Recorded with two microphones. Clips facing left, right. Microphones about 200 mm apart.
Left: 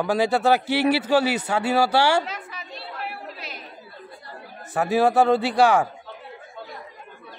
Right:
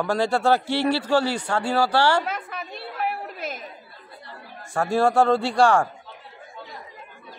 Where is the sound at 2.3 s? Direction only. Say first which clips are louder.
Right 4 dB; 55° right (ahead or behind).